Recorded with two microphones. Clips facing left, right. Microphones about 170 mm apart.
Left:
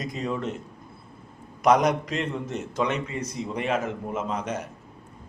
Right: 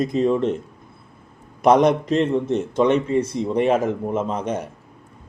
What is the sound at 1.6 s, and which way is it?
A man's voice, 30° right (ahead or behind).